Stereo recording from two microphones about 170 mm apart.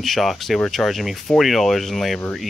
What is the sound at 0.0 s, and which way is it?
Speech, centre (ahead or behind).